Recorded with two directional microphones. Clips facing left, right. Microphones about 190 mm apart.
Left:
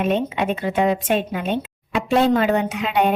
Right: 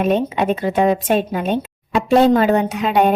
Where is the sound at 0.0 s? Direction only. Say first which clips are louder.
Right 3 dB; 40° right (ahead or behind).